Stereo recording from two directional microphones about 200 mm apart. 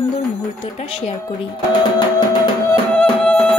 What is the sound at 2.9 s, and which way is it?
Music, 5° left (ahead or behind).